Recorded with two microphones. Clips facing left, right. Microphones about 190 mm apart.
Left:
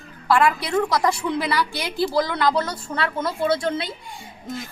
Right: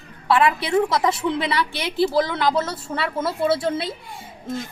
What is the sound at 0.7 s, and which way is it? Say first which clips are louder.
A woman's voice: right 1 dB; 5° right (ahead or behind).